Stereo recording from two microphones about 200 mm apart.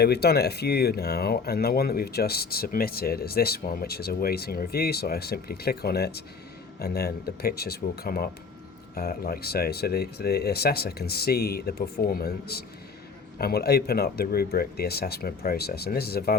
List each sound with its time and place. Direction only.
0.0 s speech: 55° left (ahead or behind)